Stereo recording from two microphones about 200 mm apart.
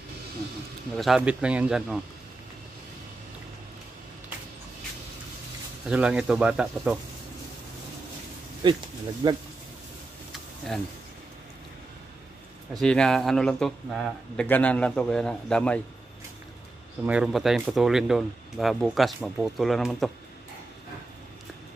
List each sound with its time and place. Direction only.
0.9 s speech: centre (ahead or behind)
5.9 s speech: 5° right (ahead or behind)
8.6 s speech: 25° right (ahead or behind)
12.8 s speech: 5° left (ahead or behind)
17.0 s speech: 5° right (ahead or behind)